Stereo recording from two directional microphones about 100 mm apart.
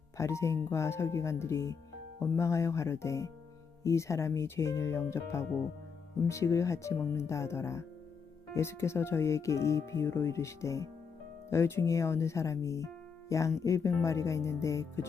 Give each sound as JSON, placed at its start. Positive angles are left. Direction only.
{"t": 0.2, "sound": "speech", "side_deg": 30}